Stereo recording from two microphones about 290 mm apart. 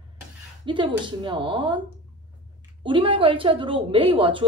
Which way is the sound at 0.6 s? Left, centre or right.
Centre.